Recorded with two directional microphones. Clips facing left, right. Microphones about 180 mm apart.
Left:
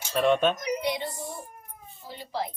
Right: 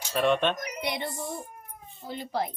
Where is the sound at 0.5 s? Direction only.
55° right (ahead or behind).